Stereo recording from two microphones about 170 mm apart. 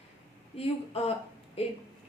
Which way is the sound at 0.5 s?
35° left (ahead or behind).